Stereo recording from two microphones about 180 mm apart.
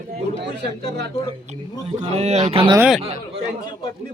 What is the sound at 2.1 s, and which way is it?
Speech, 35° right (ahead or behind).